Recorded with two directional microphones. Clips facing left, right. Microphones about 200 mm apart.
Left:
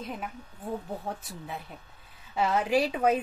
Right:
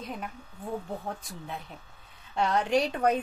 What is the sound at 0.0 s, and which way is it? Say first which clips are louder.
Speech: left 1 dB; centre (ahead or behind).